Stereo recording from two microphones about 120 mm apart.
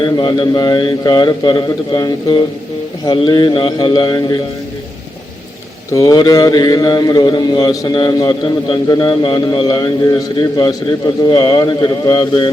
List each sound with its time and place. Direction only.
0.0 s a man's voice: 40° left (ahead or behind)
5.9 s a man's voice: 30° left (ahead or behind)